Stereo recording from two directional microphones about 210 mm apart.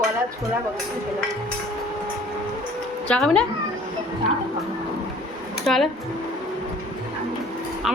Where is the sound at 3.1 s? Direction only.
5° left (ahead or behind).